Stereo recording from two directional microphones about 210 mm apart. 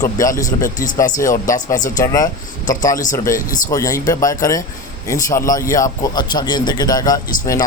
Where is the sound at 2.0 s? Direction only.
15° left (ahead or behind).